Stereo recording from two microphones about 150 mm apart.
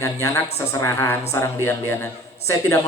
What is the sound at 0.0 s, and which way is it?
A man's voice, 20° left (ahead or behind).